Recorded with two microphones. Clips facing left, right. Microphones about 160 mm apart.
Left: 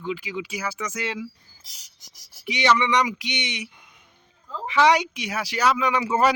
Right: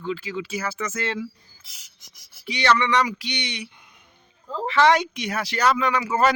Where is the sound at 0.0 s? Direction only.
15° left (ahead or behind).